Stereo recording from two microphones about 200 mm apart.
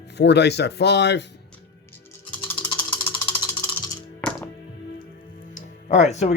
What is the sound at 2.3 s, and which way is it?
Ratchet, 10° left (ahead or behind).